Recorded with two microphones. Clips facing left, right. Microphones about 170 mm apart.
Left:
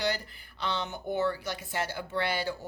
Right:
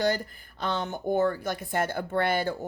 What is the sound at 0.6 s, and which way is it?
Speech, 50° right (ahead or behind).